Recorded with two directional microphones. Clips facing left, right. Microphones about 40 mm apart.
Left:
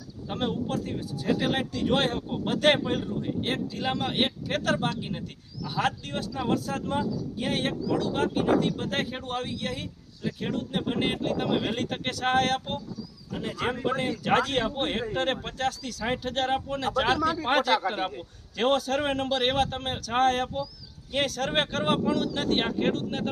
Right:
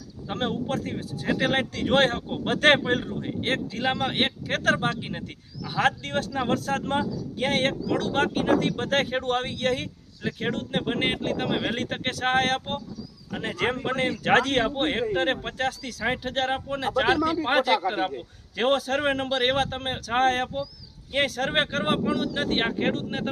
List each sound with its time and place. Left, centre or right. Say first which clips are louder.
0.7 s a man's voice: right 1 dB; right
5.8 s speech: right 5 dB; right
6.5 s speech: right 1 dB; right
10.4 s a man's voice: right 2 dB; right